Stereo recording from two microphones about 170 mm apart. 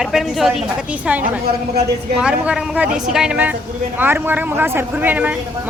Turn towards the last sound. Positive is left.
turn(degrees=-10)  # may be behind; listen again after turning